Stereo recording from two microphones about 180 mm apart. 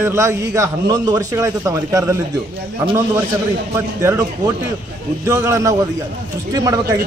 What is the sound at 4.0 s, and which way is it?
A man's voice, 15° right (ahead or behind).